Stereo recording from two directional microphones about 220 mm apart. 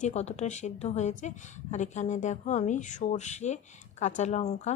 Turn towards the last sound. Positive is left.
turn(degrees=30)  # may be behind; listen again after turning